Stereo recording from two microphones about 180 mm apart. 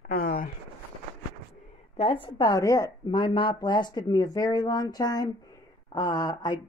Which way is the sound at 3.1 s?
25° left (ahead or behind).